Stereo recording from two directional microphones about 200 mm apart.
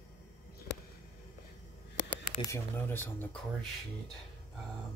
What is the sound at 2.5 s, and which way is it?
Speech, 10° left (ahead or behind).